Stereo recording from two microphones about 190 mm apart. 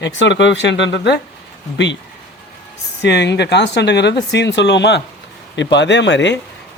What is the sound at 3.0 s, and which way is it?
Speech, 65° left (ahead or behind).